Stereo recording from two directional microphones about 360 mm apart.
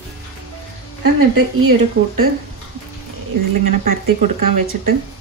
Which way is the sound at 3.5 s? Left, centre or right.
Right.